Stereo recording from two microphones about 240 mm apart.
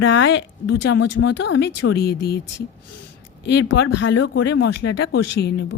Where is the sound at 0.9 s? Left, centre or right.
Left.